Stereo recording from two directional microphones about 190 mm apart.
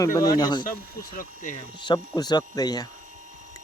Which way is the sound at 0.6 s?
45° left (ahead or behind).